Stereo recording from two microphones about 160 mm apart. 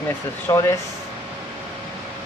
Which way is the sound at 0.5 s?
20° left (ahead or behind).